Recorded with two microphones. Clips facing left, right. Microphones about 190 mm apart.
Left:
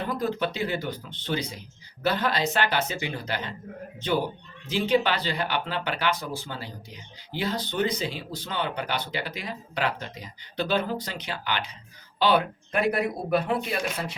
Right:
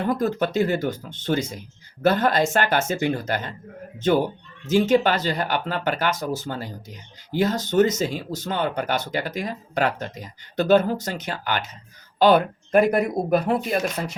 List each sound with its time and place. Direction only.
0.1 s speech: 45° right (ahead or behind)